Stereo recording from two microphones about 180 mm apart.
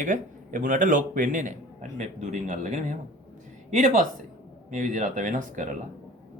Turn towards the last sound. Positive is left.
turn(degrees=-45)  # may be behind; listen again after turning